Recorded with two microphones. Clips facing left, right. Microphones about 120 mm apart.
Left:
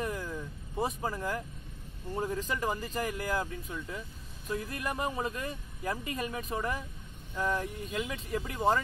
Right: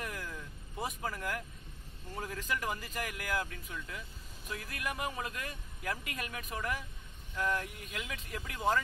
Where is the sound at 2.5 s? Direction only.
25° left (ahead or behind).